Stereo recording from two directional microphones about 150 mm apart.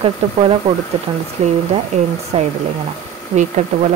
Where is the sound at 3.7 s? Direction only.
60° right (ahead or behind).